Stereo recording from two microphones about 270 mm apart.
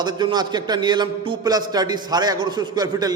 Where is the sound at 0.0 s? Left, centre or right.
Centre.